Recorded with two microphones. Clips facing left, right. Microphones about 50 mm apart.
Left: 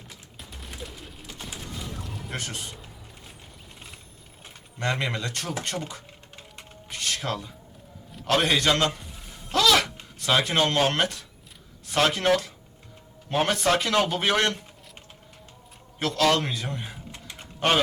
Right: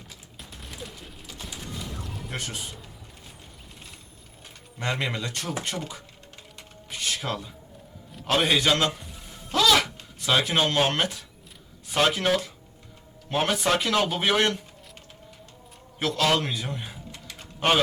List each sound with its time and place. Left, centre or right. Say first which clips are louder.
0.3 s fusillade: even; centre
2.0 s speech: left 1 dB; centre
4.8 s speech: left 1 dB; centre
6.9 s music: even; centre
8.3 s a man's voice: even; centre
16.0 s speech: left 1 dB; centre
17.1 s typing: even; left